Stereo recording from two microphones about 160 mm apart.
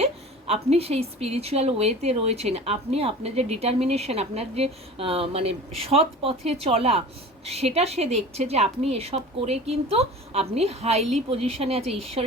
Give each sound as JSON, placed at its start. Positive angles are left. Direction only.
{"t": 0.0, "sound": "a woman's voice", "side_deg": -40}